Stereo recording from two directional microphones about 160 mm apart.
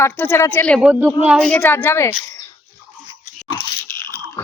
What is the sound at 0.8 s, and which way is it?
Speech, 10° right (ahead or behind).